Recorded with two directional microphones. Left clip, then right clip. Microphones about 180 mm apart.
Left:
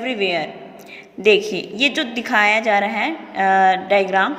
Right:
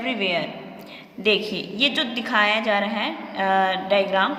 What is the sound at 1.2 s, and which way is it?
A woman's voice, 30° left (ahead or behind).